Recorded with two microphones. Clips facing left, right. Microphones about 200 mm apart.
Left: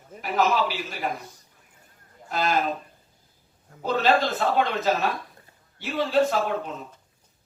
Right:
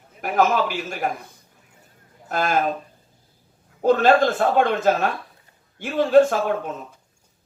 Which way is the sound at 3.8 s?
50° right (ahead or behind).